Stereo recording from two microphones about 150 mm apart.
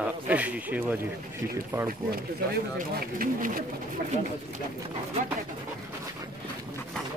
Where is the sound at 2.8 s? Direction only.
65° right (ahead or behind).